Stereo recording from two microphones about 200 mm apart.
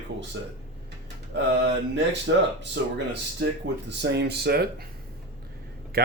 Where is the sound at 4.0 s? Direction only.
60° right (ahead or behind).